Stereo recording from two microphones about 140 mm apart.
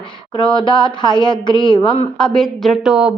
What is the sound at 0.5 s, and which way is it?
Speech, 35° left (ahead or behind).